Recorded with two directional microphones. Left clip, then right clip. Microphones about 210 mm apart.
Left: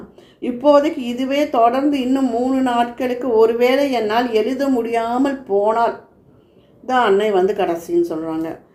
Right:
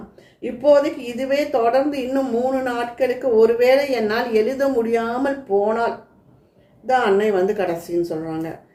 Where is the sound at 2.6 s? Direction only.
25° left (ahead or behind).